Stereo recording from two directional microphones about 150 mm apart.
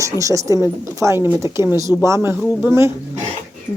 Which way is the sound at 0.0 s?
20° right (ahead or behind).